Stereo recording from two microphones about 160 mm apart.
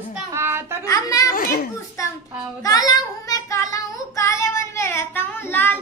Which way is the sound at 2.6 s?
20° left (ahead or behind).